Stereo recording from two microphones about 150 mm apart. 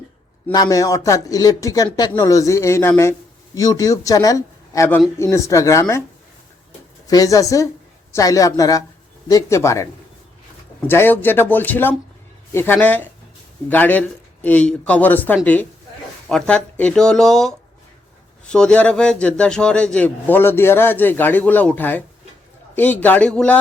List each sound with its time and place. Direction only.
0.5 s speech: 25° left (ahead or behind)
7.1 s a man's voice: 25° left (ahead or behind); by 23.6 s 5° left (ahead or behind)